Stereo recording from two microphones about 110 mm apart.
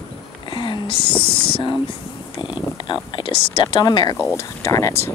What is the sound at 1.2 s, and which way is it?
Speech, 55° left (ahead or behind).